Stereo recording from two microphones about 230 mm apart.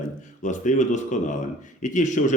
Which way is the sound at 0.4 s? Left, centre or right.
Left.